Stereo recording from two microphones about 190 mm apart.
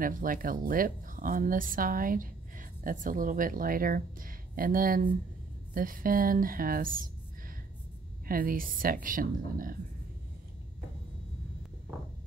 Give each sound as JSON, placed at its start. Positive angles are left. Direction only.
{"t": 0.0, "sound": "a woman's voice", "side_deg": -45}